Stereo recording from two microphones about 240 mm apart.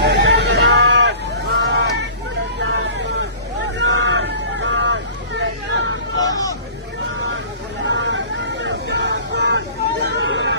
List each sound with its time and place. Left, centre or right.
0.0 s hubbub: right
1.5 s a sound: right
2.6 s vehicle: right
5.4 s hubbub: right
6.1 s hubbub: centre
7.9 s vehicle: right
8.6 s hubbub: right